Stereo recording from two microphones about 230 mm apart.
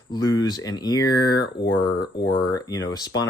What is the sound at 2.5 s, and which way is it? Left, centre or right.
Speech, centre.